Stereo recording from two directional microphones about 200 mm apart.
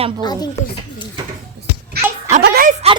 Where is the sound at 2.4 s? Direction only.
50° right (ahead or behind).